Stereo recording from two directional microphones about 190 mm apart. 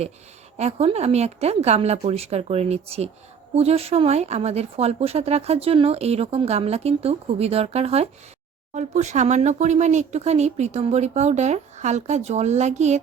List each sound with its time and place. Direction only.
0.5 s speech: 35° right (ahead or behind)